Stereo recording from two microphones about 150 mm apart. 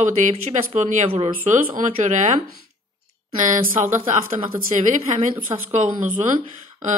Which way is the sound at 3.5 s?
55° right (ahead or behind).